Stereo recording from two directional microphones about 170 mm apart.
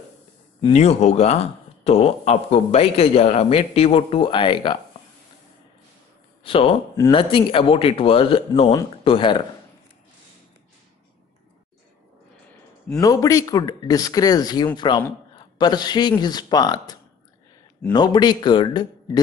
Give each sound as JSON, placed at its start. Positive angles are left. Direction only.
{"t": 0.7, "sound": "speech", "side_deg": 40}
{"t": 6.4, "sound": "speech", "side_deg": 35}
{"t": 13.0, "sound": "speech", "side_deg": 20}
{"t": 17.9, "sound": "speech", "side_deg": 25}